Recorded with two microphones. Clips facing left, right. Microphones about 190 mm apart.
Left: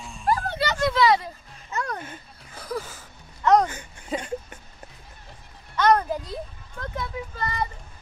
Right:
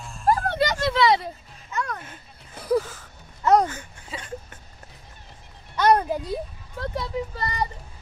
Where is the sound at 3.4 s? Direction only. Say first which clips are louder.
Even; 5° right (ahead or behind).